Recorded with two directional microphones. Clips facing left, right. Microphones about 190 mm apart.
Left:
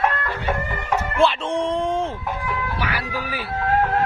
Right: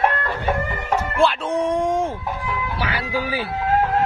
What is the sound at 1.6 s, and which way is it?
Speech, 10° right (ahead or behind).